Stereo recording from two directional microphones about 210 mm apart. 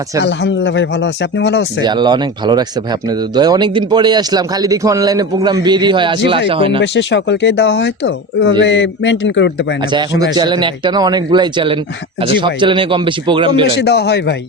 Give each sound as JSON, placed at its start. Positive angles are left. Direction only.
{"t": 0.3, "sound": "speech", "side_deg": 60}
{"t": 1.8, "sound": "speech", "side_deg": -20}
{"t": 6.8, "sound": "speech", "side_deg": 55}
{"t": 10.3, "sound": "speech", "side_deg": -20}
{"t": 13.8, "sound": "speech", "side_deg": 50}